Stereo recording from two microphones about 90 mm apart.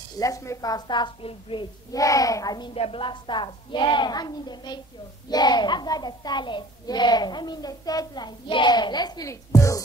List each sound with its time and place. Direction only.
0.2 s a child's voice: 35° left (ahead or behind); by 1.7 s 65° left (ahead or behind)
1.9 s a child's voice: 40° left (ahead or behind)
2.7 s a woman's voice: 80° left; by 9.3 s 50° left (ahead or behind)
9.3 s a child's voice: 35° left (ahead or behind)